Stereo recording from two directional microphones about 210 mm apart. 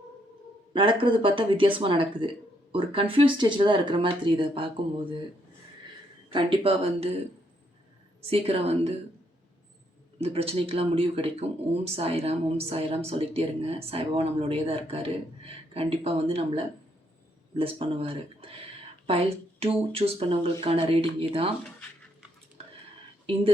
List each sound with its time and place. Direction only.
0.7 s speech: 25° right (ahead or behind)
6.3 s speech: 25° right (ahead or behind)
8.3 s speech: 30° right (ahead or behind)
10.2 s speech: 30° right (ahead or behind)